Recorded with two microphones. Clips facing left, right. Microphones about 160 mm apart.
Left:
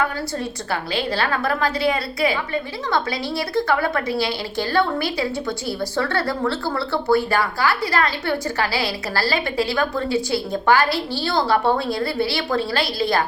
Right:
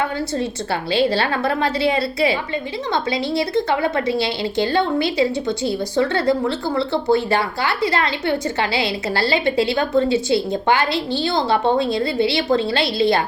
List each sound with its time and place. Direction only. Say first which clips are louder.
0.0 s a woman's voice: right 2 dB; 25° right (ahead or behind)